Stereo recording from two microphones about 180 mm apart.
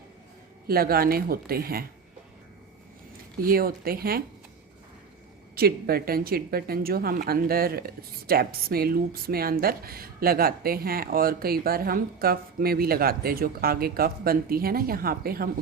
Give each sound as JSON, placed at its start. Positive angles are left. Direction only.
{"t": 0.7, "sound": "a woman's voice", "side_deg": -55}
{"t": 3.4, "sound": "a woman's voice", "side_deg": -55}
{"t": 5.5, "sound": "a woman's voice", "side_deg": -60}